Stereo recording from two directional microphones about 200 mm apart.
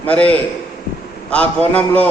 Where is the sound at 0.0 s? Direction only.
5° left (ahead or behind).